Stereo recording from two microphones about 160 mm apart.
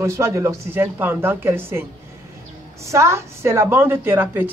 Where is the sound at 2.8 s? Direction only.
15° right (ahead or behind).